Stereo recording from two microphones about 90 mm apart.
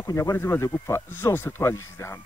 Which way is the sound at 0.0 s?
35° left (ahead or behind).